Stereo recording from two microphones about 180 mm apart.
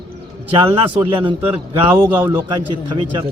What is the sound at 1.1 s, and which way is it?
Speech, 25° right (ahead or behind).